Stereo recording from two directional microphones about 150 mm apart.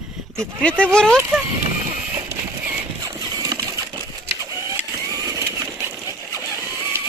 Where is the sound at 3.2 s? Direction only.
25° right (ahead or behind).